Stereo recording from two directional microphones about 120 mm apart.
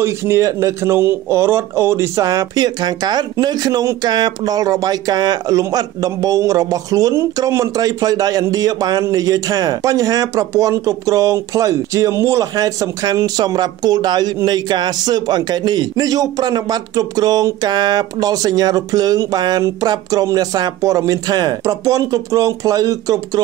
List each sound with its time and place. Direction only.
0.0 s speech: 20° right (ahead or behind)